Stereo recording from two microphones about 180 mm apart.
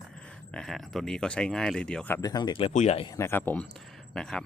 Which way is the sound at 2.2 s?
25° left (ahead or behind).